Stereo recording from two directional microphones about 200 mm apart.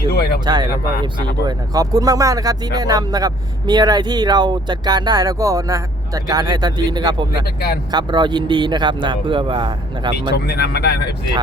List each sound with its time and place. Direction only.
0.1 s speech: 50° left (ahead or behind)
0.4 s speech: 20° right (ahead or behind)
10.3 s speech: 55° left (ahead or behind)